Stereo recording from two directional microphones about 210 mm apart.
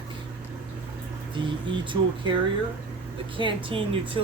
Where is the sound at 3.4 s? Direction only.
20° right (ahead or behind).